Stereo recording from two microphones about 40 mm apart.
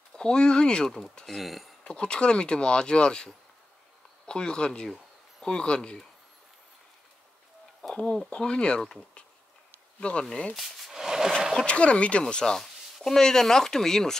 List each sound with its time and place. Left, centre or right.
0.1 s speech: centre
1.2 s speech: centre
1.9 s speech: left
7.9 s speech: left
9.9 s speech: left
10.9 s a sound: centre
11.6 s speech: left
12.5 s a sound: centre
13.2 s speech: centre